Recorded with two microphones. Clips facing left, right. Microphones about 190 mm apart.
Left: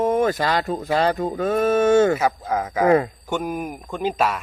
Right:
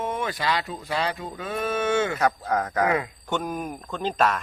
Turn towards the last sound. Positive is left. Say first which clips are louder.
# left 2 dB
turn(degrees=10)  # may be behind; listen again after turning